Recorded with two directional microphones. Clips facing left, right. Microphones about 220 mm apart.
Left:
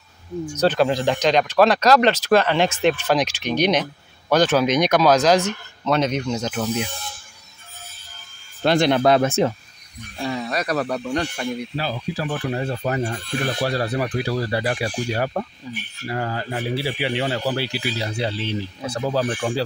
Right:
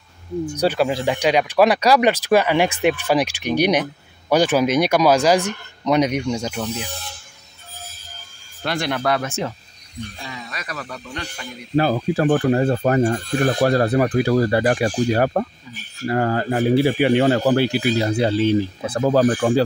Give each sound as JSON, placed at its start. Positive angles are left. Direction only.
{"t": 0.6, "sound": "speech", "side_deg": -10}
{"t": 6.6, "sound": "speech", "side_deg": 0}
{"t": 8.6, "sound": "speech", "side_deg": 25}
{"t": 10.2, "sound": "speech", "side_deg": 40}
{"t": 11.7, "sound": "speech", "side_deg": -50}
{"t": 15.7, "sound": "speech", "side_deg": 35}
{"t": 16.1, "sound": "speech", "side_deg": -55}